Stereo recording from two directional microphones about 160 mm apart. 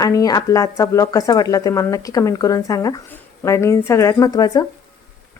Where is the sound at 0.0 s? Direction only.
20° left (ahead or behind).